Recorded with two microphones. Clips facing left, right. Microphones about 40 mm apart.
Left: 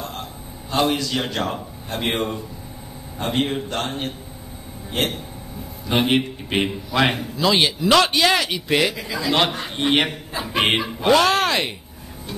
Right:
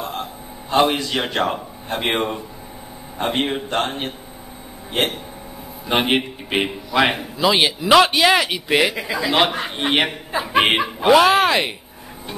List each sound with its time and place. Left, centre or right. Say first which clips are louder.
0.0 s a man's voice: right 4 dB; right